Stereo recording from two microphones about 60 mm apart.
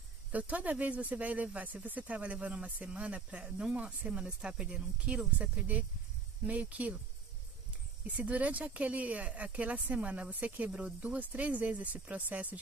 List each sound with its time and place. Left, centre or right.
0.3 s speech: right
8.1 s speech: right